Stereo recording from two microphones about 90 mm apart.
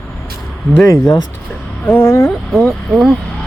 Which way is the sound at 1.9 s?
30° left (ahead or behind).